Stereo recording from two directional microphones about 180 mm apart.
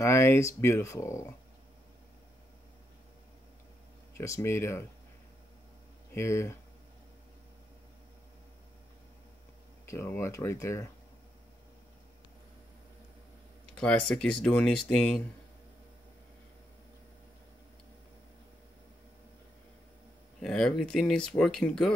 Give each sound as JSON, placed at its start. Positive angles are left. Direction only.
{"t": 0.0, "sound": "speech", "side_deg": 15}
{"t": 4.2, "sound": "speech", "side_deg": 15}
{"t": 6.1, "sound": "speech", "side_deg": 15}
{"t": 9.8, "sound": "speech", "side_deg": 15}
{"t": 13.7, "sound": "speech", "side_deg": 5}
{"t": 20.4, "sound": "speech", "side_deg": 5}